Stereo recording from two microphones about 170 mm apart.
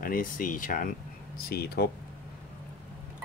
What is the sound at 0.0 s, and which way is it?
Speech, 55° left (ahead or behind).